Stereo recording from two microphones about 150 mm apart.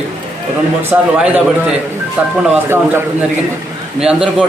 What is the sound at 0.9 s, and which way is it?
Speech, 10° right (ahead or behind).